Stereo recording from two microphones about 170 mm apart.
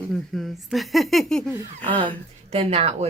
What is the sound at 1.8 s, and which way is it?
Speech, 30° right (ahead or behind).